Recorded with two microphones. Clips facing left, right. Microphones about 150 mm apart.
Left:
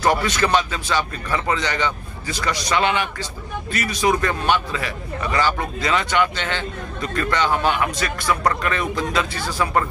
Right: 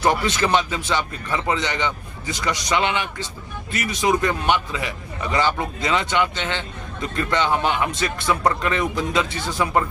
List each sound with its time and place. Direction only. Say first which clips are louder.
0.0 s a man's voice: left 1 dB; 25° right (ahead or behind)